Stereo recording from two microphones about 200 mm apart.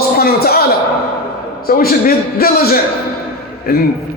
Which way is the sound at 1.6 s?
50° left (ahead or behind).